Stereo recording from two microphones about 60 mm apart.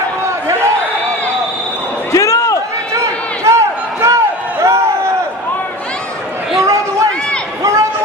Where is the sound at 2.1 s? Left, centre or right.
Left.